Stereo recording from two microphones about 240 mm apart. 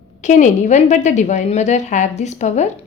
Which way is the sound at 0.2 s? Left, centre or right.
Left.